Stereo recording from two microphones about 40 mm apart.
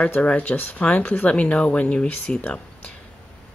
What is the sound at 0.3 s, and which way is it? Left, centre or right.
Speech, left.